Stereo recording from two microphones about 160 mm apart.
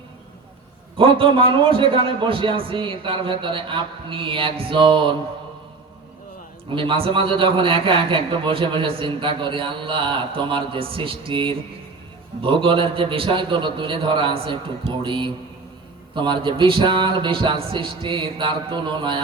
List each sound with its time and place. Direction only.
0.9 s a man's voice: 35° right (ahead or behind)
6.7 s a man's voice: 30° right (ahead or behind)